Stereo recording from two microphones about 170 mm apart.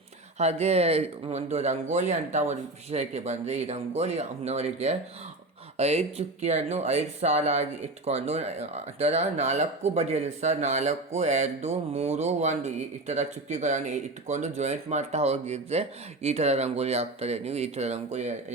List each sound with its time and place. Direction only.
0.3 s speech: 40° right (ahead or behind)